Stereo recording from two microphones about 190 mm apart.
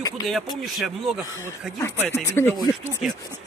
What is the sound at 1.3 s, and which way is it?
Speech, 10° right (ahead or behind).